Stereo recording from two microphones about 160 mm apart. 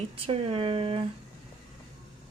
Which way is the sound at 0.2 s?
35° right (ahead or behind).